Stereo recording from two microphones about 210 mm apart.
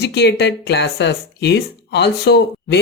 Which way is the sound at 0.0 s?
50° left (ahead or behind).